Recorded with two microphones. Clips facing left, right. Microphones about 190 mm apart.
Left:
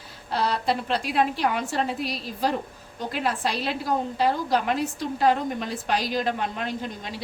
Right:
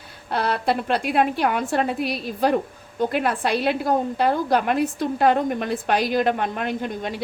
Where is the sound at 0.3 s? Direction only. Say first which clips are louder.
Right 2 dB; 55° right (ahead or behind).